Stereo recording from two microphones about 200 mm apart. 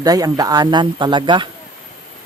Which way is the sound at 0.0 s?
20° right (ahead or behind).